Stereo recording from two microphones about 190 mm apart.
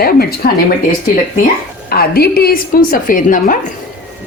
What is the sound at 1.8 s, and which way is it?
A woman's voice, 55° left (ahead or behind).